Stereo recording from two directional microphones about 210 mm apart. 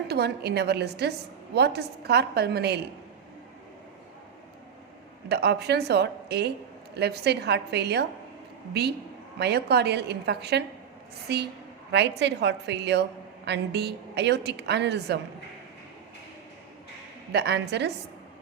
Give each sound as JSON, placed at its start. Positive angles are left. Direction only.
{"t": 0.1, "sound": "a woman's voice", "side_deg": -50}
{"t": 5.3, "sound": "a woman's voice", "side_deg": -50}
{"t": 9.4, "sound": "a woman's voice", "side_deg": -50}
{"t": 17.3, "sound": "a woman's voice", "side_deg": -55}